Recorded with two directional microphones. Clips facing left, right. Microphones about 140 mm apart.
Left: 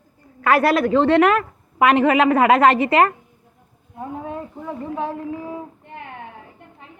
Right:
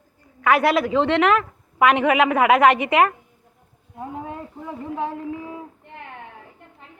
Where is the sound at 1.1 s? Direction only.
10° left (ahead or behind).